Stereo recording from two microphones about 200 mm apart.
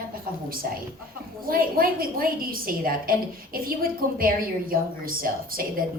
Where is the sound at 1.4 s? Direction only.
45° right (ahead or behind).